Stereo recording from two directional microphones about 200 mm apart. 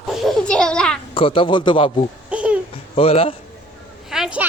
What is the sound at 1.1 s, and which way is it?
Speech, 25° left (ahead or behind).